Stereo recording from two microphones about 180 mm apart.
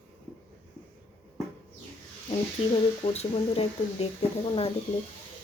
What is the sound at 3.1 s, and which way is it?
Speech, 35° left (ahead or behind).